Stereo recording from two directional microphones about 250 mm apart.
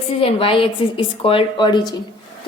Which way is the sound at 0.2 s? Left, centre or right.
Left.